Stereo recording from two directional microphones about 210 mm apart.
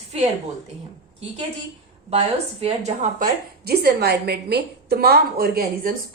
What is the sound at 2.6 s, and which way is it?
A woman's voice, 30° right (ahead or behind).